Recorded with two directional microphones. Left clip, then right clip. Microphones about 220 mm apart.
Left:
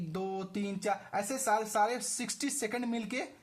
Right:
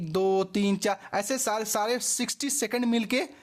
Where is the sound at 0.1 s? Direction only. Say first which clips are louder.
Right 13 dB; 50° right (ahead or behind).